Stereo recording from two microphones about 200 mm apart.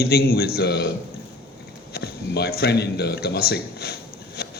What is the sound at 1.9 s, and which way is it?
A man's voice, 50° left (ahead or behind).